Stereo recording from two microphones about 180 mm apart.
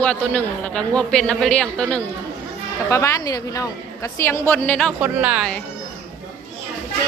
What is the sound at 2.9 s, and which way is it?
A woman's voice, 15° left (ahead or behind).